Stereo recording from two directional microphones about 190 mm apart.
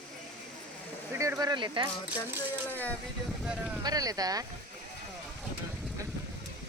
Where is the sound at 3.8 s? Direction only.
20° right (ahead or behind).